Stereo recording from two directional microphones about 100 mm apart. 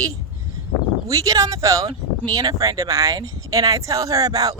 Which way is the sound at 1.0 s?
35° right (ahead or behind).